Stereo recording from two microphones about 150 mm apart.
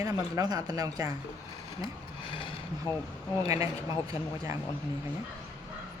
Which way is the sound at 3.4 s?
20° right (ahead or behind).